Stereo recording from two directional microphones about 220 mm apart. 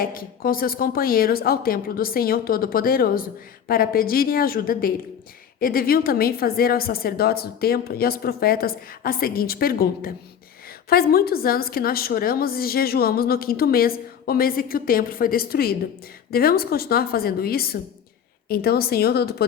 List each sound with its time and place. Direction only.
0.0 s a woman's voice: 40° left (ahead or behind)